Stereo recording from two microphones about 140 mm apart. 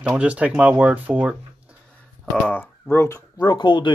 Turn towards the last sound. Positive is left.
turn(degrees=35)  # may be behind; listen again after turning